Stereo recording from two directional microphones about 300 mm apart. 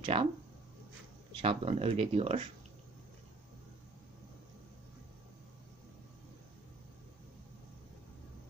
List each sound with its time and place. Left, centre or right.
0.0 s speech: centre
1.4 s speech: centre